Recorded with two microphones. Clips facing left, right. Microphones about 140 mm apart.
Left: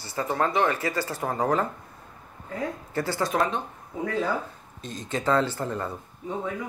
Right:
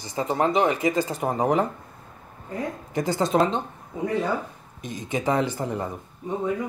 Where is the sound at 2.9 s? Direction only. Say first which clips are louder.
Right 5 dB; 20° right (ahead or behind).